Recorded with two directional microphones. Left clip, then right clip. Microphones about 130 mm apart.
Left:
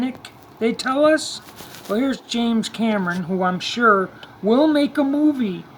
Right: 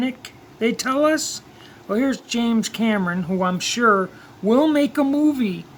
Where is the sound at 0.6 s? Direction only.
20° right (ahead or behind).